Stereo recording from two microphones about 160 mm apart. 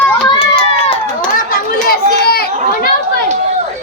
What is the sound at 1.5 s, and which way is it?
Chatter, 70° left (ahead or behind).